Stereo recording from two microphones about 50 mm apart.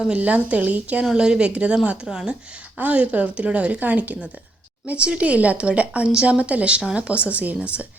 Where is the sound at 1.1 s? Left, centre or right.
Centre.